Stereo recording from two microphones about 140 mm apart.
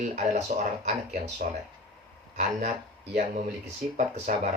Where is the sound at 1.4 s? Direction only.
90° right.